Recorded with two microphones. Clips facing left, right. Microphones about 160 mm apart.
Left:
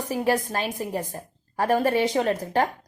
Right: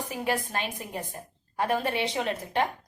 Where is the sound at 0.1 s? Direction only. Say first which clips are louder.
Left 7 dB; 40° left (ahead or behind).